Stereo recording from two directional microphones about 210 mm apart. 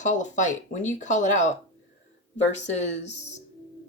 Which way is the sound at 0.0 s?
35° left (ahead or behind).